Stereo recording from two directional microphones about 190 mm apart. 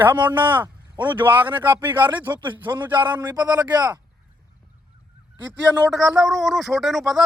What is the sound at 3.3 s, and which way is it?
Speech, 20° right (ahead or behind).